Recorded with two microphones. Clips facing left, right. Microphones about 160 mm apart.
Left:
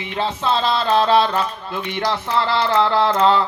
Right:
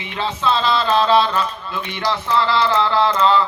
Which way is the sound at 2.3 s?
55° left (ahead or behind).